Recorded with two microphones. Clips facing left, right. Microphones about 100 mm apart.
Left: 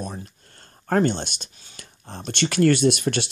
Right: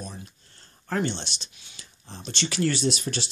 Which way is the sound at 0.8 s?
50° left (ahead or behind).